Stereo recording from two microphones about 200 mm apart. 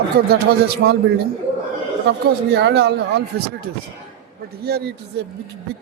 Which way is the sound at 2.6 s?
60° right (ahead or behind).